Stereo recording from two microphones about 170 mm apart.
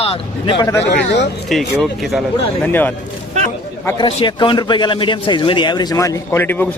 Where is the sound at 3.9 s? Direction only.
30° left (ahead or behind).